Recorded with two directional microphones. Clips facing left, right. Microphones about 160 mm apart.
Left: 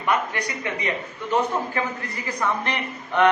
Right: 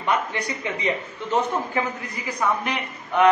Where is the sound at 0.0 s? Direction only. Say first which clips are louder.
Even; 25° right (ahead or behind).